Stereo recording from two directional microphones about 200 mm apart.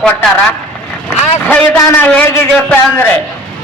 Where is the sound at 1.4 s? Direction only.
10° left (ahead or behind).